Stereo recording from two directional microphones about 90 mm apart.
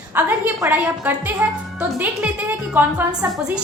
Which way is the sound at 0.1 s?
20° right (ahead or behind).